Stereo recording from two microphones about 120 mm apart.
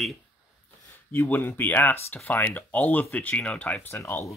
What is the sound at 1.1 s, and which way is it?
Speech, 15° left (ahead or behind).